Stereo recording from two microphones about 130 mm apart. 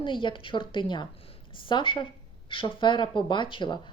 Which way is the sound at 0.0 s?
40° left (ahead or behind).